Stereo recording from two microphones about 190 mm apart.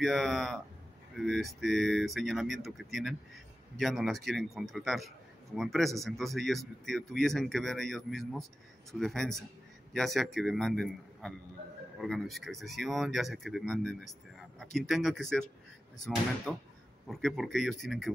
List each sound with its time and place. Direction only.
0.0 s speech: centre (ahead or behind)
16.5 s speech: 5° left (ahead or behind)